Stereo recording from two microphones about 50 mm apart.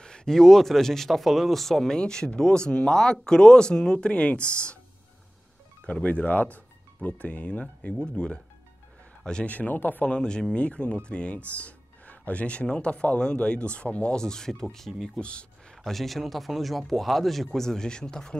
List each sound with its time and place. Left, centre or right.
0.0 s speech: centre
6.0 s a man's voice: left; by 9.5 s centre
9.5 s speech: left
10.0 s speech: centre
14.9 s speech: centre
15.1 s speech: left
15.7 s speech: centre